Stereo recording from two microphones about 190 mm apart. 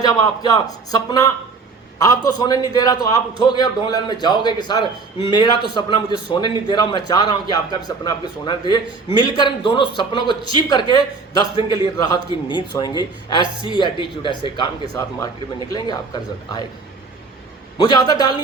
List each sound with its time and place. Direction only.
0.0 s a man's voice: 20° left (ahead or behind)
17.7 s a man's voice: 20° left (ahead or behind)